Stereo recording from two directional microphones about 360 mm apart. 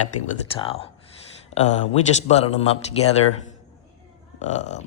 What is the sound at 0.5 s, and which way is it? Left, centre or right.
Speech, centre.